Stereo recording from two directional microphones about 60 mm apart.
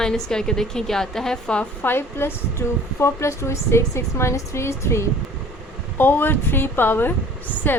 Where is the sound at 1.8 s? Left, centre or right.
Left.